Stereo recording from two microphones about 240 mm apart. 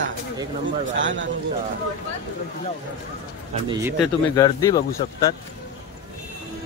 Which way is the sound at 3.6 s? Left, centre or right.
Centre.